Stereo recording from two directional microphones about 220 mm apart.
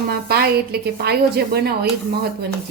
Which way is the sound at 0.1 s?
45° right (ahead or behind).